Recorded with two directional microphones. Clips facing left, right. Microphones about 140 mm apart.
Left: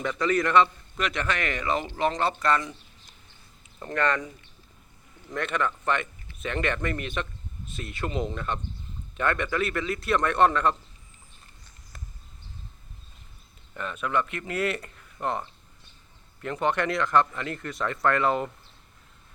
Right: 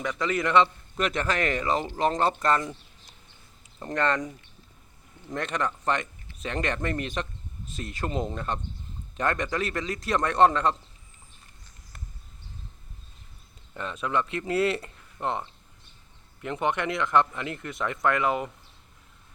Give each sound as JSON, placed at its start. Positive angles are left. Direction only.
{"t": 0.2, "sound": "speech", "side_deg": -20}
{"t": 0.9, "sound": "speech", "side_deg": -40}
{"t": 3.8, "sound": "speech", "side_deg": -30}
{"t": 5.3, "sound": "speech", "side_deg": -35}
{"t": 13.7, "sound": "speech", "side_deg": -25}